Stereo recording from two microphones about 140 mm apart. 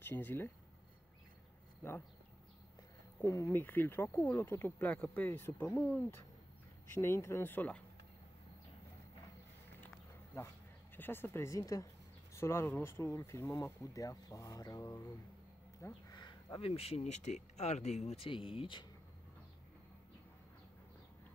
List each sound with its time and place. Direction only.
0.0 s speech: 15° left (ahead or behind)
1.8 s speech: 15° left (ahead or behind)
3.2 s speech: 20° left (ahead or behind)
10.3 s speech: 15° left (ahead or behind); by 18.9 s 35° left (ahead or behind)